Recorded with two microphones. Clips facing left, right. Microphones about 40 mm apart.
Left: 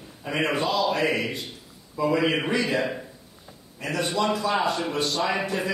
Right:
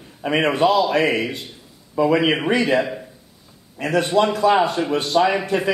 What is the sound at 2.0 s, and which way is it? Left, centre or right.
Speech, right.